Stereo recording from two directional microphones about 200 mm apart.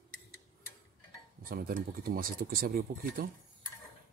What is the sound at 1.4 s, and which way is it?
Speech, 45° right (ahead or behind).